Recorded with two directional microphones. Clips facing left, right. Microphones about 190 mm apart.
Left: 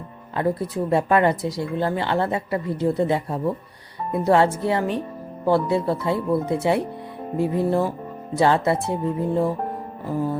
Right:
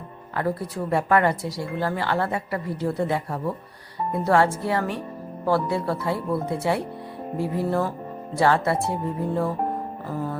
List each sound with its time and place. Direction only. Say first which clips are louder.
0.3 s speech: left 3 dB; 20° left (ahead or behind)